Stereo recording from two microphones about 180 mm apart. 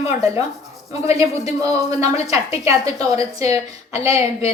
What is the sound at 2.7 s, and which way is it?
Speech, 20° right (ahead or behind).